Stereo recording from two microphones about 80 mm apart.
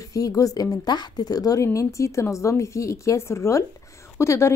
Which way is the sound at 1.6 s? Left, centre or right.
Left.